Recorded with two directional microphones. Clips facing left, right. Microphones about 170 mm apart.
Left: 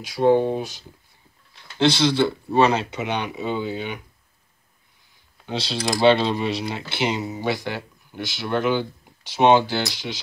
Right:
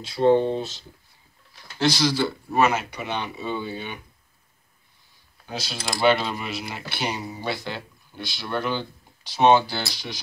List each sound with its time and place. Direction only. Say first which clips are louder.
0.0 s speech: left 1 dB; 10° left (ahead or behind)
1.8 s speech: left 3 dB; 25° left (ahead or behind)
5.5 s speech: left 6 dB; 30° left (ahead or behind)